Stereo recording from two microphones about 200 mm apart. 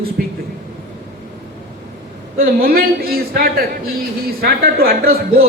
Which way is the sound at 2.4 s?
50° right (ahead or behind).